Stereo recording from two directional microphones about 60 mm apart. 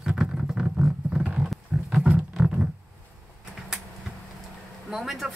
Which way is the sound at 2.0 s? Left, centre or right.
Right.